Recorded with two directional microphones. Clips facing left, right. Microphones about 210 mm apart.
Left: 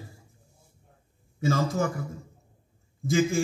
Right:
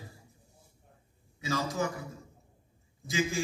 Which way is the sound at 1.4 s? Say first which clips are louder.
Left 6 dB; 50° left (ahead or behind).